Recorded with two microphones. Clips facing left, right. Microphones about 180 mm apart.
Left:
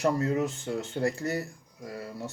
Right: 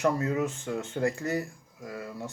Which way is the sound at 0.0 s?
35° left (ahead or behind).